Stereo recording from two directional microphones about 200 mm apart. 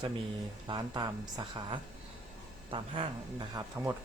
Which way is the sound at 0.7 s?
20° right (ahead or behind).